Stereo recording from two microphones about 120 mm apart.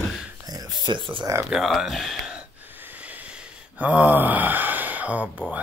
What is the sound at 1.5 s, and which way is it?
Gasp, centre (ahead or behind).